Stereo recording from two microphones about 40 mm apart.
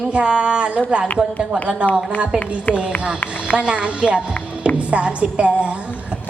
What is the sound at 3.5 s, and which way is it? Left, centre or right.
A woman's voice, right.